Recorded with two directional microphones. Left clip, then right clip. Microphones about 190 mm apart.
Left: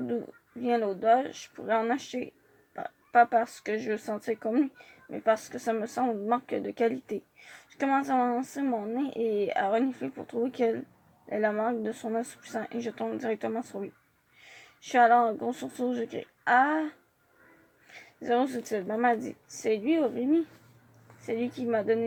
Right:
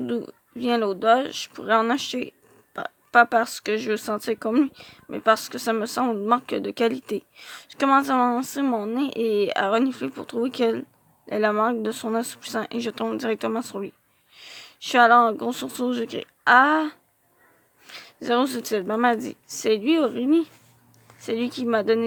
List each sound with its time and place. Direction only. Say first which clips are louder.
0.6 s speech: right 5 dB; 45° right (ahead or behind)
17.9 s speech: right 5 dB; 50° right (ahead or behind)